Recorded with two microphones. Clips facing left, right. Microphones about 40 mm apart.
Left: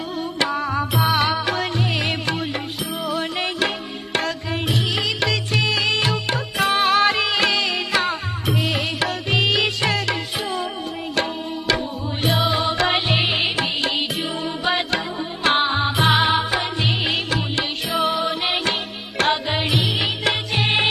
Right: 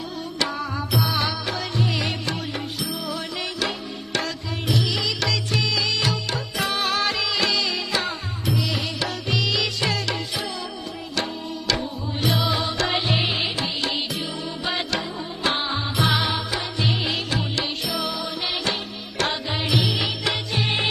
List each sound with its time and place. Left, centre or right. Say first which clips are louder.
0.3 s music: left 5 dB; left
4.7 s music: even; left
11.7 s music: left 3 dB; left